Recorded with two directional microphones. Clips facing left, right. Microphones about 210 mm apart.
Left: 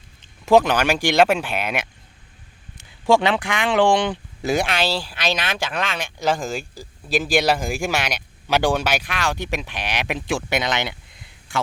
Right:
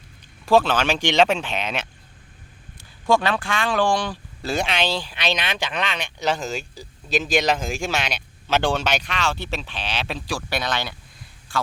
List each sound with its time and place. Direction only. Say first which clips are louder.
0.4 s speech: left 2 dB; 15° left (ahead or behind)
3.1 s speech: left 3 dB; 20° left (ahead or behind)
4.6 s speech: left 1 dB; 5° left (ahead or behind)